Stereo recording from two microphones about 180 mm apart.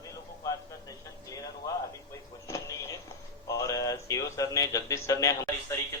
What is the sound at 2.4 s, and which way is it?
Vehicle, 15° left (ahead or behind).